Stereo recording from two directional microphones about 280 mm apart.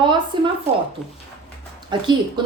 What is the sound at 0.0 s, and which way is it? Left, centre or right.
Speech, centre.